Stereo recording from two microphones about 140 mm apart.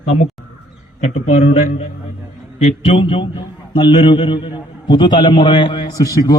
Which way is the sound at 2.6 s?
50° left (ahead or behind).